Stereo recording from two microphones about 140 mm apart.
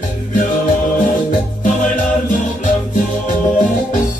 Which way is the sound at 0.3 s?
70° left (ahead or behind).